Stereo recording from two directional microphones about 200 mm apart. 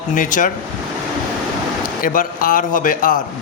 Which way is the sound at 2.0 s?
45° left (ahead or behind).